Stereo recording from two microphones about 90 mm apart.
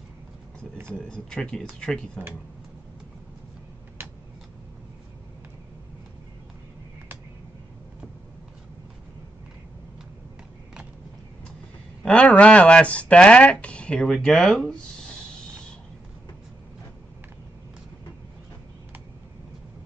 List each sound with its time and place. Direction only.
0.9 s speech: 10° left (ahead or behind)
4.0 s a sound: 25° right (ahead or behind)
12.0 s speech: 10° left (ahead or behind)